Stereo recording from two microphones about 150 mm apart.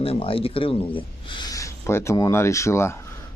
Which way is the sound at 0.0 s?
40° left (ahead or behind).